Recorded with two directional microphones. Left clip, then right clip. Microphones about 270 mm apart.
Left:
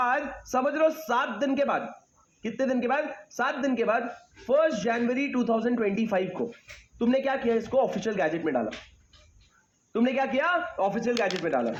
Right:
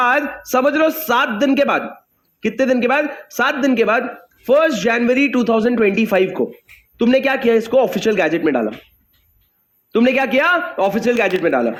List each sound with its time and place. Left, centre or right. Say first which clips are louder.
0.0 s a man's voice: right 10 dB; right
9.9 s a man's voice: right 11 dB; right